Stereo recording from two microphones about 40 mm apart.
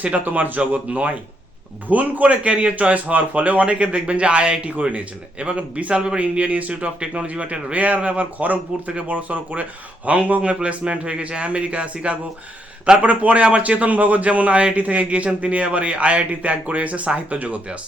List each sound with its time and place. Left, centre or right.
0.0 s speech: right
6.1 s speech: right